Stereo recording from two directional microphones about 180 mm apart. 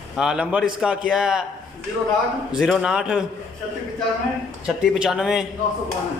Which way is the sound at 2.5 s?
5° right (ahead or behind).